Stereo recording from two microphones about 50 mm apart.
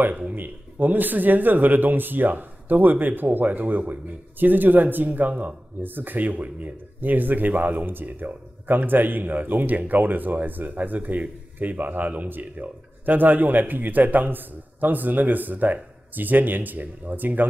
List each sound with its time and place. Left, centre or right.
0.3 s a man's voice: right